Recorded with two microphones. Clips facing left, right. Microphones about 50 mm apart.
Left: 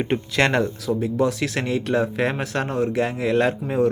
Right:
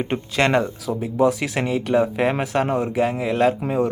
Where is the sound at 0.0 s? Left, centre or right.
Centre.